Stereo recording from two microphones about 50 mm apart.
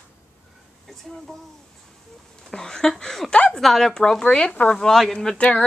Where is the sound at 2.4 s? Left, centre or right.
Centre.